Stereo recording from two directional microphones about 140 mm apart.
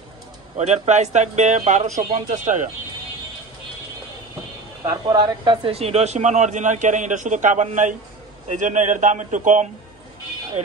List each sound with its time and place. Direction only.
0.6 s a man's voice: 55° right (ahead or behind)
4.8 s a man's voice: 30° right (ahead or behind); by 9.7 s 60° right (ahead or behind)